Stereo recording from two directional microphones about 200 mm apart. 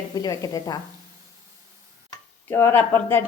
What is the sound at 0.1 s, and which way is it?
Speech, 20° left (ahead or behind).